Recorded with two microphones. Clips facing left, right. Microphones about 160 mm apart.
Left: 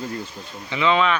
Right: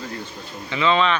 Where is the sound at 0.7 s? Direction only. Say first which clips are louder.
Even; 15° left (ahead or behind).